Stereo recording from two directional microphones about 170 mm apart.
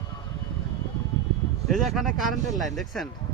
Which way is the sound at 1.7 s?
Centre (ahead or behind).